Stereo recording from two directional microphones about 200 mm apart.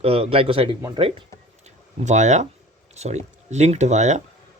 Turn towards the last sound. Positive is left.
turn(degrees=-35)  # may be behind; listen again after turning